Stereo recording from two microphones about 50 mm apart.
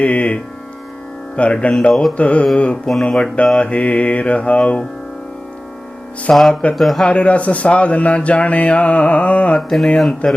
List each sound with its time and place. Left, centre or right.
0.0 s speech: left
1.4 s speech: left
2.1 s speech: left
6.3 s speech: centre
7.0 s speech: left
9.6 s speech: centre
10.2 s speech: left